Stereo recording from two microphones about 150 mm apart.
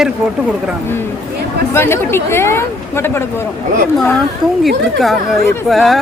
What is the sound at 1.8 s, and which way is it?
Speech, 15° left (ahead or behind).